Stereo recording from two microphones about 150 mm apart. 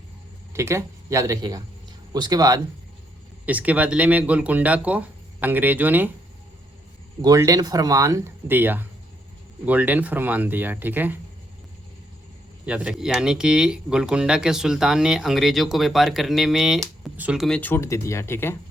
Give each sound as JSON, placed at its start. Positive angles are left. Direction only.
{"t": 0.5, "sound": "speech", "side_deg": -20}
{"t": 3.4, "sound": "speech", "side_deg": -10}
{"t": 7.2, "sound": "speech", "side_deg": -25}
{"t": 12.6, "sound": "speech", "side_deg": -5}
{"t": 17.6, "sound": "speech", "side_deg": 15}